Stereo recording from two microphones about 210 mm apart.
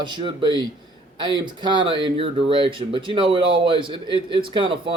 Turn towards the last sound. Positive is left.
turn(degrees=-25)  # may be behind; listen again after turning